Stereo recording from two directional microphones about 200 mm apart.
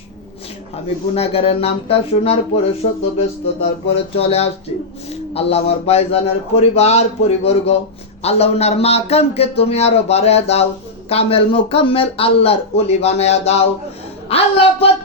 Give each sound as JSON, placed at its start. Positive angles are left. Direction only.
{"t": 1.1, "sound": "a man's voice", "side_deg": 30}